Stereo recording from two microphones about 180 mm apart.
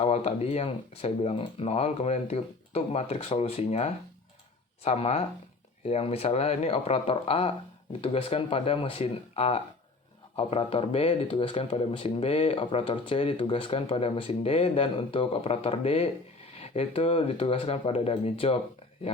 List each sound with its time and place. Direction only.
0.0 s speech: 35° left (ahead or behind)